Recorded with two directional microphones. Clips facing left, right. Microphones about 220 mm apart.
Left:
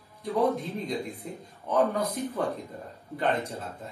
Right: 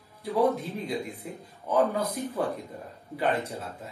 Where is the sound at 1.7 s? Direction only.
Centre (ahead or behind).